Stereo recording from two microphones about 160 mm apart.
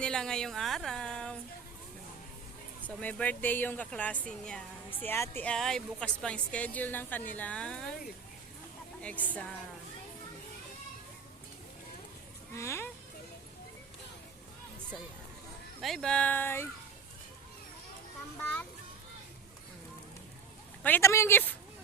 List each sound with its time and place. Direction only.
0.0 s a woman's voice: 5° left (ahead or behind)
2.8 s speech: 10° left (ahead or behind)
9.0 s speech: 10° left (ahead or behind)
12.5 s speech: 15° left (ahead or behind)
15.8 s speech: centre (ahead or behind)
18.3 s speech: 10° left (ahead or behind)
20.8 s speech: 15° left (ahead or behind)